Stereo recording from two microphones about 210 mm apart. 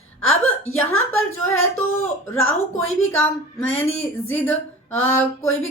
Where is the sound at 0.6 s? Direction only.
10° left (ahead or behind).